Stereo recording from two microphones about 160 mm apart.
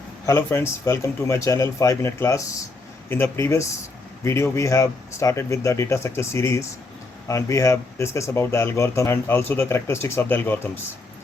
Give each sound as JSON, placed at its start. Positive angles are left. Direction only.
{"t": 0.3, "sound": "speech", "side_deg": 15}